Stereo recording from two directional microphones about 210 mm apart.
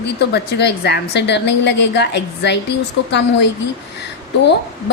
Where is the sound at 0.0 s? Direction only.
50° left (ahead or behind).